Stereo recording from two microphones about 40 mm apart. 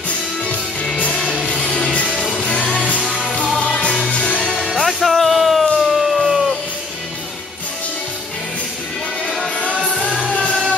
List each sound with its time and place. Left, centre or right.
1.4 s music: centre
2.0 s music: centre
3.6 s music: left
4.6 s music: centre